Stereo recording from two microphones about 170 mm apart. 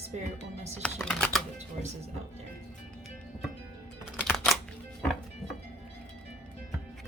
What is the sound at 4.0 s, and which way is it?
Music, 5° right (ahead or behind).